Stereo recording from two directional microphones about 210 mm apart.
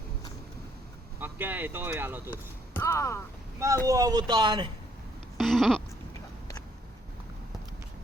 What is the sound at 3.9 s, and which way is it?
Speech, 15° right (ahead or behind).